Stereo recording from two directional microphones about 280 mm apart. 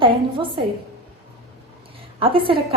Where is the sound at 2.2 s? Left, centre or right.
Centre.